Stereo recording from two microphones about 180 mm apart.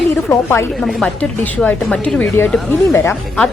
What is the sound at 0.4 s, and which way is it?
Speech, 15° left (ahead or behind).